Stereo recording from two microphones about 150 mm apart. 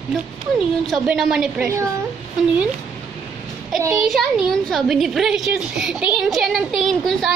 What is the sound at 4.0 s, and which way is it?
A woman's voice, centre (ahead or behind).